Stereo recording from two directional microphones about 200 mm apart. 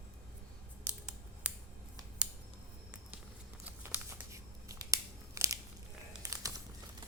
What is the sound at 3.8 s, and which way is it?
Crumpling, 15° right (ahead or behind).